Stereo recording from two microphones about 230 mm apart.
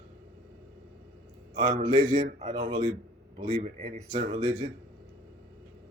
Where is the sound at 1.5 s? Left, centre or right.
Right.